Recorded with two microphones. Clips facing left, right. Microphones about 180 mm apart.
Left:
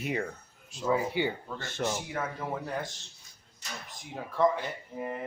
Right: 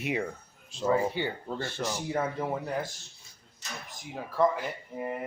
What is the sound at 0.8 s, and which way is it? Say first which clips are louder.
Speech: right 1 dB; 10° left (ahead or behind).